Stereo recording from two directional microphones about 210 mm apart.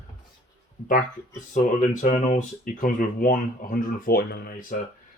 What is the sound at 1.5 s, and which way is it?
Speech, 35° left (ahead or behind).